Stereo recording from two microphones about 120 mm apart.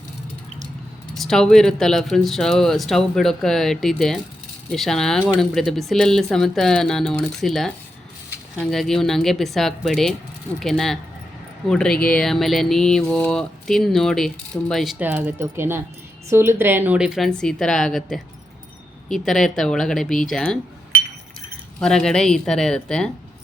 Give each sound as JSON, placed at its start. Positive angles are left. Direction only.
{"t": 1.1, "sound": "speech", "side_deg": 5}
{"t": 14.9, "sound": "speech", "side_deg": -15}
{"t": 21.8, "sound": "speech", "side_deg": 5}